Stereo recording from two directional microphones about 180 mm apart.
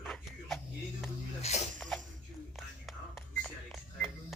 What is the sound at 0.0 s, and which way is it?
Shuffle, centre (ahead or behind).